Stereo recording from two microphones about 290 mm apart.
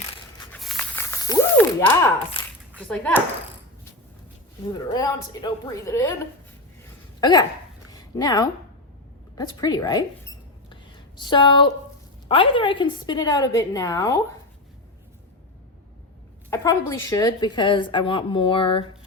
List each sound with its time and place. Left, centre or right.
0.5 s a sound: centre
2.8 s speech: centre
4.7 s a woman's voice: centre
7.2 s a woman's voice: centre
9.3 s mouse: centre
12.3 s a woman's voice: centre
16.5 s a woman's voice: centre